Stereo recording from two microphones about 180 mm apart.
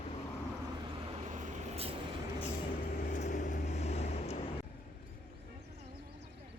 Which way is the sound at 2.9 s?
45° left (ahead or behind).